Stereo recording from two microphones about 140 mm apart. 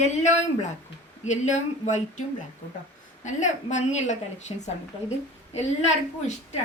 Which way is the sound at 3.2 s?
60° left (ahead or behind).